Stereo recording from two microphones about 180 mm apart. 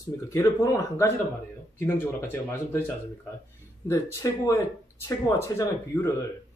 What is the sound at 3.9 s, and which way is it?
Speech, 20° left (ahead or behind).